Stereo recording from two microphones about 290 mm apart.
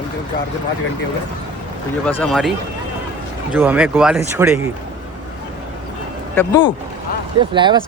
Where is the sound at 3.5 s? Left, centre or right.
Centre.